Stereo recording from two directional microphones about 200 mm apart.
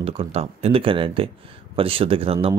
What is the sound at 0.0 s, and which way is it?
Speech, 30° right (ahead or behind).